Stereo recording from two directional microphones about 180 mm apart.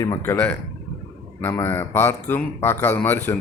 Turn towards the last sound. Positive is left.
turn(degrees=10)  # may be behind; listen again after turning